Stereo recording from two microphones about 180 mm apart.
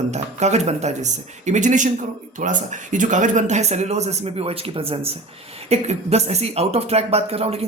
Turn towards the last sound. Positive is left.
turn(degrees=-35)  # may be behind; listen again after turning